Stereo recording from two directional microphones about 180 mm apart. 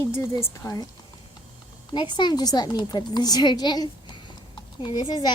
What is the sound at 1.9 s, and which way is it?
A woman's voice, 25° left (ahead or behind).